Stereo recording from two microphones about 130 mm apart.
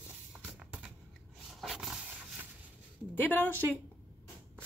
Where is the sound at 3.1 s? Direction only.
15° left (ahead or behind).